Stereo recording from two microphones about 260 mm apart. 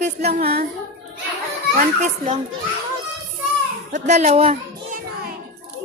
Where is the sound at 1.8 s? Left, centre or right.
Right.